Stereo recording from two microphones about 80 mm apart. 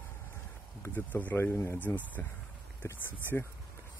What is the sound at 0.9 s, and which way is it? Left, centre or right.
Speech, left.